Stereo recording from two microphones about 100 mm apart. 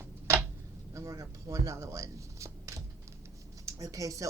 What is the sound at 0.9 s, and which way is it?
Speech, 35° right (ahead or behind).